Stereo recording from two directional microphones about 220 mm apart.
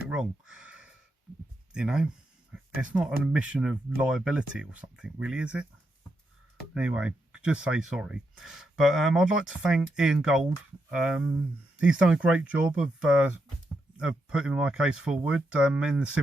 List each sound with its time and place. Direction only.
0.1 s a sound: 5° right (ahead or behind)
1.7 s speech: 5° right (ahead or behind)
6.7 s speech: 5° right (ahead or behind)